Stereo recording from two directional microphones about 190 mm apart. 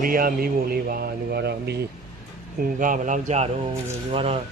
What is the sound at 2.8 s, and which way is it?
Speech, 45° right (ahead or behind).